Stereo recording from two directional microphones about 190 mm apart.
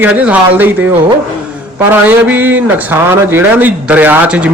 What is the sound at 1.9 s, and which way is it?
A man's voice, 10° right (ahead or behind).